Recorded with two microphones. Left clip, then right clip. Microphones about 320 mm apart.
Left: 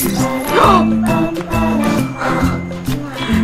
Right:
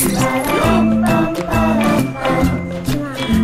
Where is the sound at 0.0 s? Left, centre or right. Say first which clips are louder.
Right 1 dB; centre.